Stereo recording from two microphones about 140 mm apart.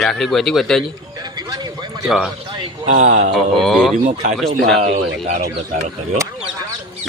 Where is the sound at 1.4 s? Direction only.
30° right (ahead or behind).